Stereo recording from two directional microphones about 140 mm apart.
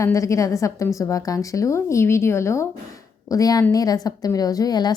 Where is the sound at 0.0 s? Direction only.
20° left (ahead or behind).